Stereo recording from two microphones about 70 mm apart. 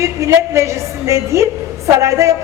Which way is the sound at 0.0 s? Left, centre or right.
Right.